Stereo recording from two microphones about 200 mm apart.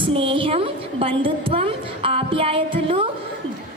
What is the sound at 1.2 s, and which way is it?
A woman's voice, 25° right (ahead or behind).